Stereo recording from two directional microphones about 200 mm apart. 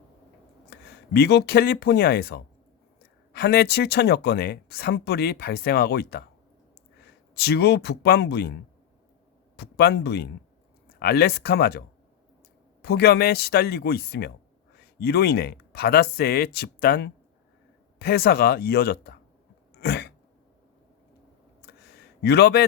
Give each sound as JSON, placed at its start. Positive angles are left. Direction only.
{"t": 0.7, "sound": "speech", "side_deg": 55}
{"t": 7.3, "sound": "speech", "side_deg": 55}
{"t": 9.6, "sound": "speech", "side_deg": 55}
{"t": 12.8, "sound": "speech", "side_deg": 55}
{"t": 19.8, "sound": "throat clearing", "side_deg": 55}
{"t": 21.6, "sound": "a sound", "side_deg": 50}